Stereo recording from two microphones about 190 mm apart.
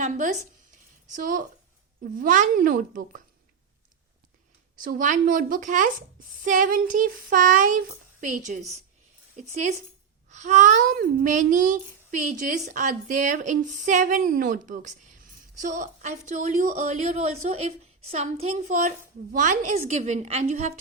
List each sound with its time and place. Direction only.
0.0 s a woman's voice: 40° right (ahead or behind)
1.1 s child singing: 45° right (ahead or behind)
4.8 s child singing: 45° right (ahead or behind)
8.2 s a woman's voice: 40° right (ahead or behind)